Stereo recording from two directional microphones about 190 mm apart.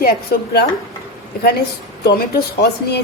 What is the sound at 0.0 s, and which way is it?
Speech, 55° left (ahead or behind).